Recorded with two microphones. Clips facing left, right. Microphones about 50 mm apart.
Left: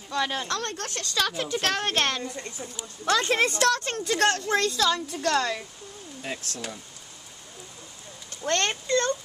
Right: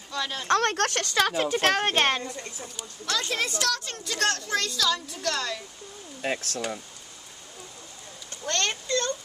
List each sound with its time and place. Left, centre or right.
0.1 s speech: centre
0.5 s speech: right
1.1 s speech: right
3.1 s speech: left
6.2 s speech: right
8.5 s speech: left